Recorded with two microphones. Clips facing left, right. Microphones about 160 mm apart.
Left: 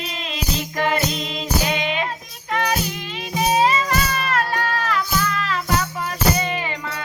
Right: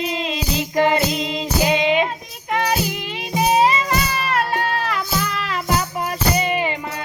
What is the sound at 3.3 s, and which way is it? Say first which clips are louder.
Music: right 2 dB; 15° right (ahead or behind).